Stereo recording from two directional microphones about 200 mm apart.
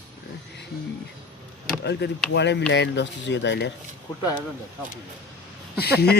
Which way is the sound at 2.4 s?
60° left (ahead or behind).